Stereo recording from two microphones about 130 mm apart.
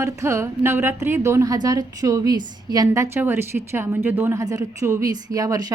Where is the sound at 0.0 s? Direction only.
20° right (ahead or behind).